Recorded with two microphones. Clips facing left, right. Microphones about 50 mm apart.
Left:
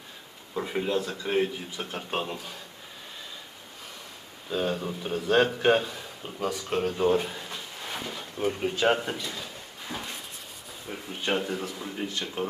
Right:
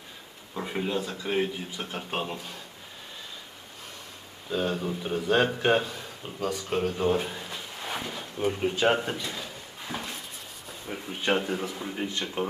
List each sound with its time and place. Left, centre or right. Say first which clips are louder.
0.5 s speech: left 2 dB; centre
4.4 s a man's voice: even; centre